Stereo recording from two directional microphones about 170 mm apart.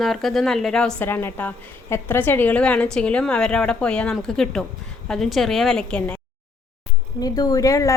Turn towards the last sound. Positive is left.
turn(degrees=20)  # may be behind; listen again after turning